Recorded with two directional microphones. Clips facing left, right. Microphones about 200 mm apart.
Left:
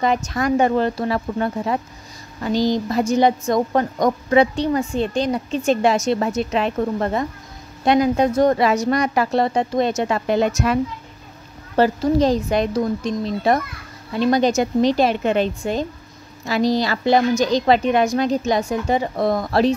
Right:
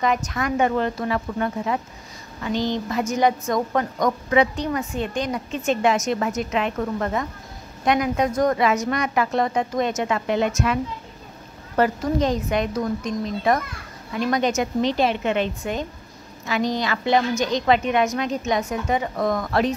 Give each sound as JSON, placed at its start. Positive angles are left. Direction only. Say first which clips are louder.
{"t": 0.0, "sound": "a woman's voice", "louder": "left 3 dB", "side_deg": 35}
{"t": 11.7, "sound": "a woman's voice", "louder": "left 4 dB", "side_deg": 30}